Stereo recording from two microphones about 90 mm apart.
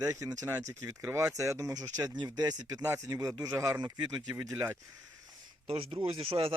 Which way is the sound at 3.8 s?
50° right (ahead or behind).